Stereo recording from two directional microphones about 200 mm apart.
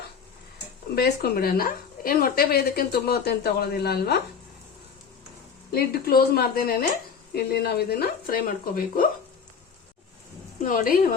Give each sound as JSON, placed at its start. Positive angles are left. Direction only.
{"t": 0.9, "sound": "speech", "side_deg": 50}
{"t": 5.7, "sound": "speech", "side_deg": 50}
{"t": 10.6, "sound": "speech", "side_deg": 45}